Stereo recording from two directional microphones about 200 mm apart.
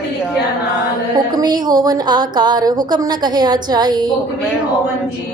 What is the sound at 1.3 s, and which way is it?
A woman's voice, 20° right (ahead or behind).